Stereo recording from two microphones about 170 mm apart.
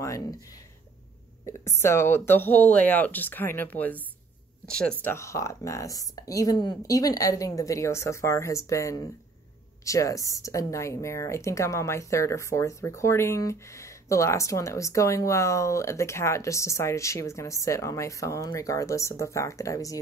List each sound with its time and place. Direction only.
0.0 s speech: 20° left (ahead or behind)
1.4 s speech: 15° left (ahead or behind)
5.0 s speech: 15° left (ahead or behind)